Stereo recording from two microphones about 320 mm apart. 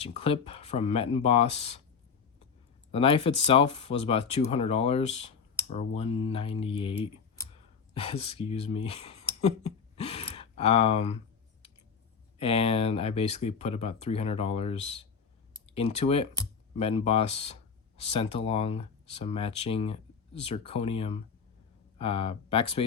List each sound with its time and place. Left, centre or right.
0.0 s speech: centre
2.9 s speech: centre
12.4 s speech: centre